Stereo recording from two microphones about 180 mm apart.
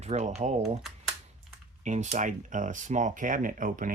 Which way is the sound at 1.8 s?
40° right (ahead or behind).